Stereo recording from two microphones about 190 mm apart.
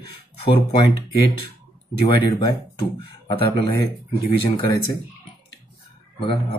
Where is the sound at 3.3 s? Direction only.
30° left (ahead or behind).